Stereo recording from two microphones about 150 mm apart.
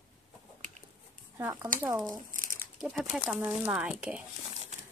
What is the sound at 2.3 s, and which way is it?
Crumpling, 65° right (ahead or behind).